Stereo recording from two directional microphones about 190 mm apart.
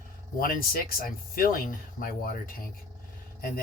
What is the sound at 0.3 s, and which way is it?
Speech, 50° left (ahead or behind).